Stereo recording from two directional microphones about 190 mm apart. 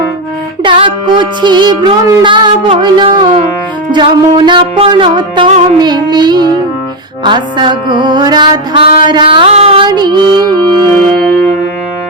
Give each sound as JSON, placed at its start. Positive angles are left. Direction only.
{"t": 0.6, "sound": "music", "side_deg": -25}
{"t": 5.5, "sound": "music", "side_deg": -35}
{"t": 5.8, "sound": "music", "side_deg": -20}